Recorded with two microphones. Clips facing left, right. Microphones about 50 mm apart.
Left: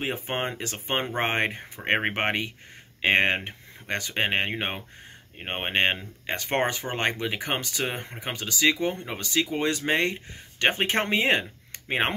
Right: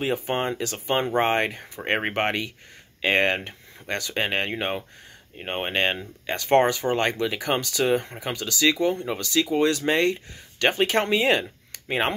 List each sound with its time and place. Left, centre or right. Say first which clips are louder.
0.0 s speech: right 4 dB; left